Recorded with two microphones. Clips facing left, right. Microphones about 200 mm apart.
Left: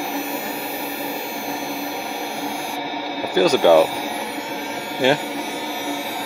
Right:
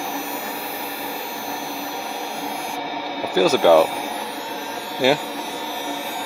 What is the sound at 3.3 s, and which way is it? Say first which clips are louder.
Speech: left 1 dB; 5° right (ahead or behind).